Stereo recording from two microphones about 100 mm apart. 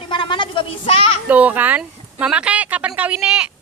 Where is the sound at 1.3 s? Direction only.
15° right (ahead or behind).